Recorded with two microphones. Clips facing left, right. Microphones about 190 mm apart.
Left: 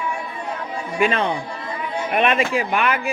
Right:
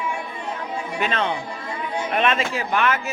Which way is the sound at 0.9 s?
10° left (ahead or behind).